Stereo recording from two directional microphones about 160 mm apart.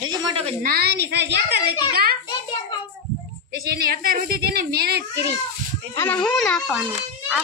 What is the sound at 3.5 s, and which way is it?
A child's voice, 70° right (ahead or behind).